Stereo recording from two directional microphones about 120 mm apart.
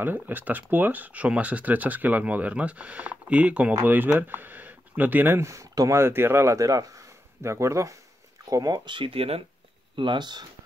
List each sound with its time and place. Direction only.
0.0 s speech: 15° right (ahead or behind); by 9.4 s 55° right (ahead or behind)
9.9 s speech: 40° right (ahead or behind)